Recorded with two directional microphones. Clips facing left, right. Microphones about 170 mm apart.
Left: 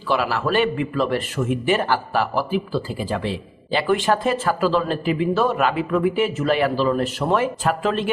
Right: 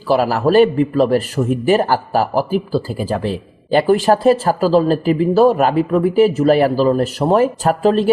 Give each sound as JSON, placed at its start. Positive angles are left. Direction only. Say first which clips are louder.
{"t": 0.1, "sound": "a man's voice", "louder": "right 7 dB", "side_deg": -40}